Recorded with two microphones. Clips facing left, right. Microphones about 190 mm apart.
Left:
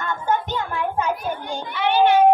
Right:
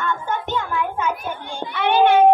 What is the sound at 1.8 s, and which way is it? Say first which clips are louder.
Child singing: right 1 dB; 55° right (ahead or behind).